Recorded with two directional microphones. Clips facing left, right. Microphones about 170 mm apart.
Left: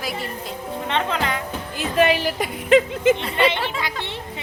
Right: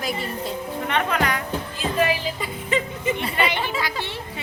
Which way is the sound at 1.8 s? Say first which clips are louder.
Left 4 dB; 65° left (ahead or behind).